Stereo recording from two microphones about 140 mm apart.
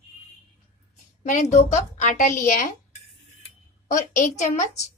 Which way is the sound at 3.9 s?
65° left (ahead or behind).